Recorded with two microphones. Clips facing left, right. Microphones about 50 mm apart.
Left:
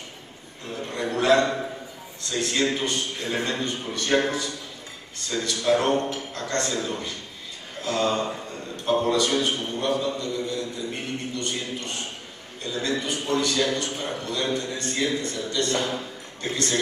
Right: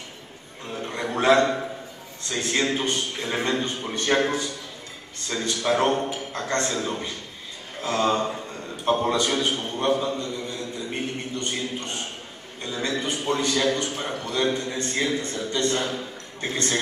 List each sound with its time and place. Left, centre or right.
0.7 s a sound: right
2.2 s a man's voice: right
5.9 s a sound: centre
6.3 s a man's voice: right
15.7 s speech: left
16.3 s speech: right